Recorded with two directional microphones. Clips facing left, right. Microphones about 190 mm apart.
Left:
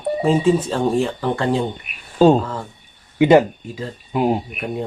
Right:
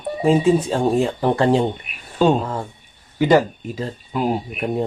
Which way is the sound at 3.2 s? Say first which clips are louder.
Left 3 dB; 20° left (ahead or behind).